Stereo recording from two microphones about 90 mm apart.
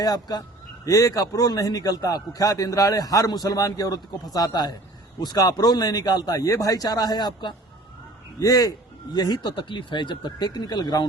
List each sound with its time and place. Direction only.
0.0 s a man's voice: 45° left (ahead or behind)